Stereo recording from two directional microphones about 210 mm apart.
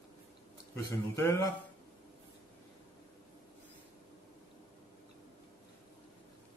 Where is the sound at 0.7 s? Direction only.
15° left (ahead or behind).